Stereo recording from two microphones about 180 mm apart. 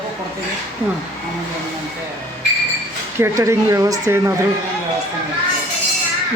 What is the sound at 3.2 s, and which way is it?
Speech, 15° right (ahead or behind).